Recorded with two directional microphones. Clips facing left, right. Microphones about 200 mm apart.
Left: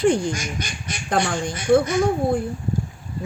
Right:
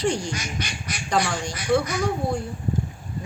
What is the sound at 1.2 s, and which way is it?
Speech, 25° left (ahead or behind).